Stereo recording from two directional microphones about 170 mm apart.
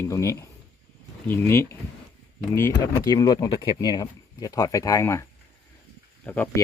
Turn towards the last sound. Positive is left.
turn(degrees=10)  # may be behind; listen again after turning